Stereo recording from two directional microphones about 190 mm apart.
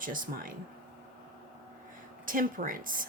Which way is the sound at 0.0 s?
45° right (ahead or behind).